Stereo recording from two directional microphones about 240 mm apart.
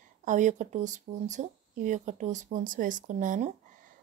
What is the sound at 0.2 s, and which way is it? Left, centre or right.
Speech, right.